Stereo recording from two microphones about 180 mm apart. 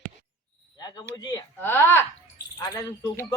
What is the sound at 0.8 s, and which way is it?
Speech, 20° left (ahead or behind).